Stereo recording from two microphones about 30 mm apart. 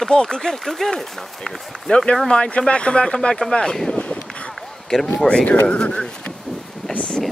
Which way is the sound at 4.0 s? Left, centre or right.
Left.